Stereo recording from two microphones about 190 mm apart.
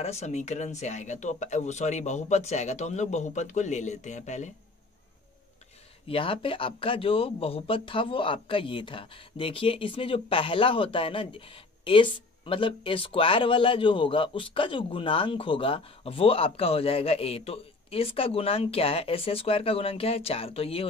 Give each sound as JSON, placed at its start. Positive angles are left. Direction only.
{"t": 0.0, "sound": "speech", "side_deg": 35}
{"t": 6.0, "sound": "speech", "side_deg": 30}